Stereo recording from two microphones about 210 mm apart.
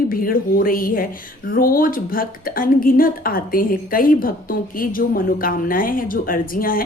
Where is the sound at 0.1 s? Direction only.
45° left (ahead or behind).